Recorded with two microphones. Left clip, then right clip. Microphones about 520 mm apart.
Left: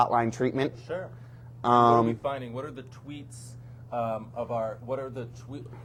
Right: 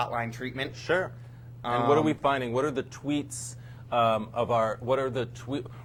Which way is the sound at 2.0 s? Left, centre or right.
Right.